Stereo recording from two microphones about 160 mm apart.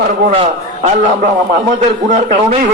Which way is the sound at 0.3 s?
40° right (ahead or behind).